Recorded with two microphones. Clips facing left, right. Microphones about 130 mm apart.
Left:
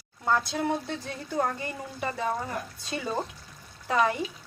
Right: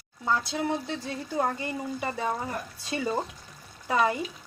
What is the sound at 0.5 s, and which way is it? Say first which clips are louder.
Speech: even; centre (ahead or behind).